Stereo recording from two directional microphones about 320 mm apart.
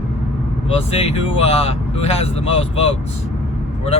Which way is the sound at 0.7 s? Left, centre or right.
Centre.